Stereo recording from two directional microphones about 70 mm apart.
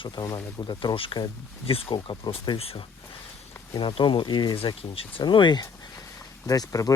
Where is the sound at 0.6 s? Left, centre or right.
Left.